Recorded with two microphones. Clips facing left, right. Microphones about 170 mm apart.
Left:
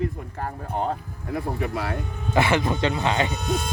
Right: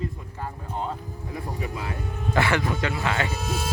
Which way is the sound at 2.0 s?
Centre (ahead or behind).